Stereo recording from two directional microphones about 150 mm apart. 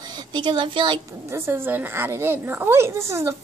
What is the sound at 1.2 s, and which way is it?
A woman's voice, 15° right (ahead or behind).